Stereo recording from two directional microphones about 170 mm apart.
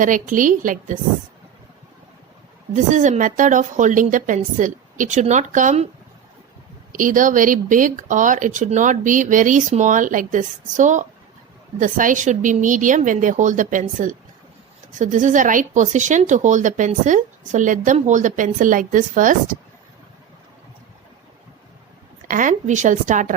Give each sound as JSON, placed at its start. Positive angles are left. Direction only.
{"t": 0.0, "sound": "speech", "side_deg": -50}
{"t": 2.7, "sound": "speech", "side_deg": -45}
{"t": 6.9, "sound": "speech", "side_deg": -50}
{"t": 22.3, "sound": "speech", "side_deg": -50}